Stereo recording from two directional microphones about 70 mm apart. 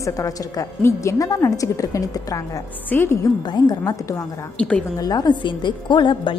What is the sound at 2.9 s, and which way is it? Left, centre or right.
Speech, left.